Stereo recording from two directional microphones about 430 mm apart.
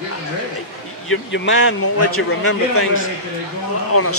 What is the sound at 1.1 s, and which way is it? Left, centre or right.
A man's voice, left.